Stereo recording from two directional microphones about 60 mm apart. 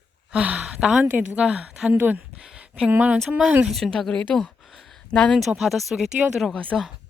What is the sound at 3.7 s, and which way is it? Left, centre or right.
A woman's voice, centre.